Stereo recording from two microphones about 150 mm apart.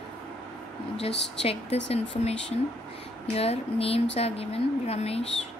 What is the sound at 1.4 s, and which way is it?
Speech, 40° left (ahead or behind).